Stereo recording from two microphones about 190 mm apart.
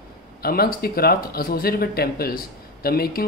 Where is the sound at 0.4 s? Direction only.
55° left (ahead or behind).